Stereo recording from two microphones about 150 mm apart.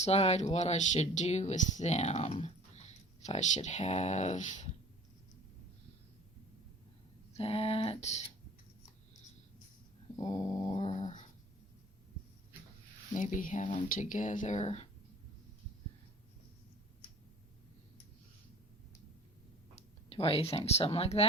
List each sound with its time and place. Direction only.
0.0 s speech: 45° left (ahead or behind)
7.3 s a sound: 40° left (ahead or behind)
10.2 s dog: 25° left (ahead or behind)
13.1 s speech: 60° left (ahead or behind)
20.1 s speech: 40° left (ahead or behind)